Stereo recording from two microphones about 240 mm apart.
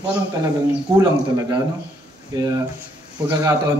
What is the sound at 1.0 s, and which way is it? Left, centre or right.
A man's voice, centre.